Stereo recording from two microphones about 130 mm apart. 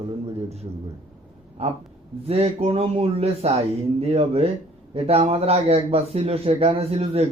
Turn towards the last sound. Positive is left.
turn(degrees=-55)  # may be behind; listen again after turning